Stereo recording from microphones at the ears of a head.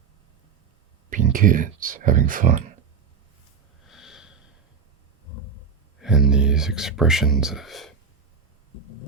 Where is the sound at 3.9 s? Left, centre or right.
Left.